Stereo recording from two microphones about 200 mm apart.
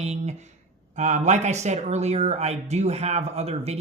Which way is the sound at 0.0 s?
35° right (ahead or behind).